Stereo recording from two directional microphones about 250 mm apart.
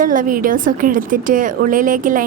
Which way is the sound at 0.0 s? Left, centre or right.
Right.